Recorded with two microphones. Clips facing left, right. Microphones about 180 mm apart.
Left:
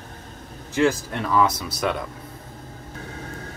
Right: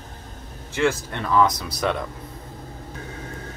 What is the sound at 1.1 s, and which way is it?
Speech, 5° left (ahead or behind).